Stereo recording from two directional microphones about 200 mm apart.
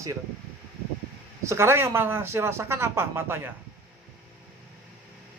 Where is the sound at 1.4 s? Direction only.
15° right (ahead or behind).